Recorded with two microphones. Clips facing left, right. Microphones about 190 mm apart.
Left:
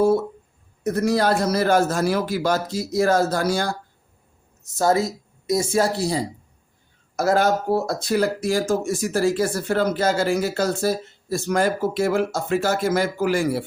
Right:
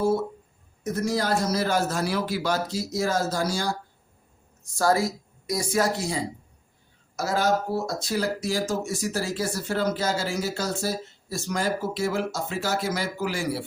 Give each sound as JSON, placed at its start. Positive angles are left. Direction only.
{"t": 0.9, "sound": "speech", "side_deg": 65}
{"t": 4.6, "sound": "speech", "side_deg": 20}
{"t": 7.2, "sound": "speech", "side_deg": 55}